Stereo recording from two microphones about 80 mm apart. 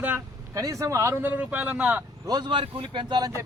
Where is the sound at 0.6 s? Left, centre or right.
Right.